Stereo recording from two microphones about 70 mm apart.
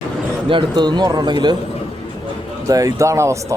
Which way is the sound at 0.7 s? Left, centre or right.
Right.